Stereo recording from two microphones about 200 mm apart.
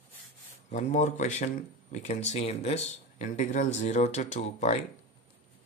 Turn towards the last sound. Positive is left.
turn(degrees=35)  # may be behind; listen again after turning